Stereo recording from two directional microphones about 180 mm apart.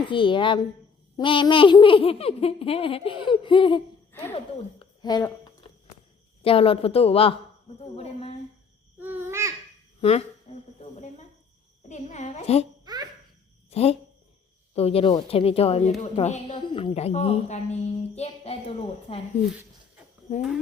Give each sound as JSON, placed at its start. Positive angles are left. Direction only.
{"t": 0.1, "sound": "a child's voice", "side_deg": 25}
{"t": 4.1, "sound": "speech", "side_deg": 10}
{"t": 4.4, "sound": "speech", "side_deg": 25}
{"t": 6.4, "sound": "a woman's voice", "side_deg": 30}
{"t": 9.0, "sound": "babbling", "side_deg": -10}
{"t": 10.0, "sound": "a woman's voice", "side_deg": 35}
{"t": 12.8, "sound": "babbling", "side_deg": -25}
{"t": 13.7, "sound": "a sound", "side_deg": 35}
{"t": 14.8, "sound": "a woman's voice", "side_deg": 35}
{"t": 20.3, "sound": "speech", "side_deg": 45}